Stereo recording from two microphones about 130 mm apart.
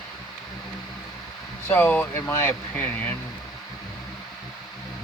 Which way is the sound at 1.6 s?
15° left (ahead or behind).